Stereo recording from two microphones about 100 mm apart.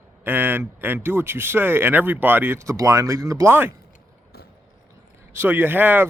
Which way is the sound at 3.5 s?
20° right (ahead or behind).